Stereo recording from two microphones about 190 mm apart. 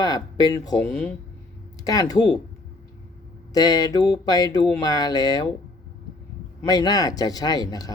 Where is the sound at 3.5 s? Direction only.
20° left (ahead or behind).